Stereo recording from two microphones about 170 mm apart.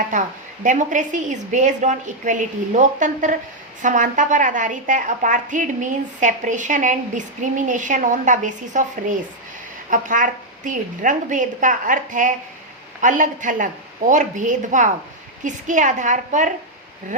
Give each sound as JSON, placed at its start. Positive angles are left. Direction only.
{"t": 0.1, "sound": "a woman's voice", "side_deg": -50}